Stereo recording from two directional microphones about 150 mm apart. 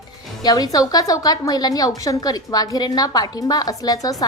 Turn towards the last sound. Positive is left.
turn(degrees=25)  # may be behind; listen again after turning